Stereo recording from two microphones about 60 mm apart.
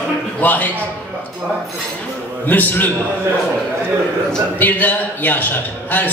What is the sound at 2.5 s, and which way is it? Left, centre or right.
Speech, left.